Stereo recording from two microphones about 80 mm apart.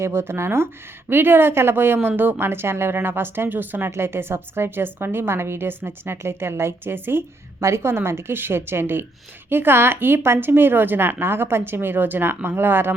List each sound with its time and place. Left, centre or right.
0.0 s a woman's voice: right